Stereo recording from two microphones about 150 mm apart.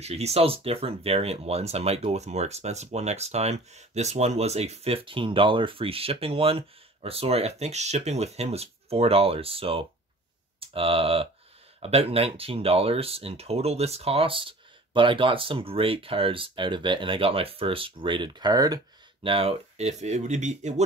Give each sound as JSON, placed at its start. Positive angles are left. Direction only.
{"t": 0.0, "sound": "speech", "side_deg": -45}
{"t": 19.2, "sound": "speech", "side_deg": -40}